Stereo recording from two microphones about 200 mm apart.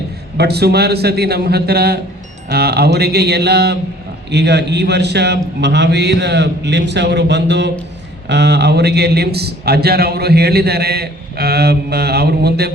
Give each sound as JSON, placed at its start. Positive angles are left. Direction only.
{"t": 0.3, "sound": "a man's voice", "side_deg": -55}